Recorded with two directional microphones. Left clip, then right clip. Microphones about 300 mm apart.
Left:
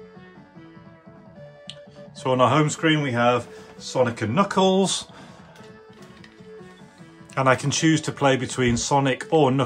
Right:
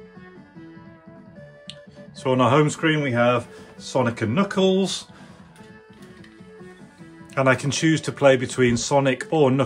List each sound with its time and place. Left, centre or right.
1.7 s speech: centre
7.3 s speech: centre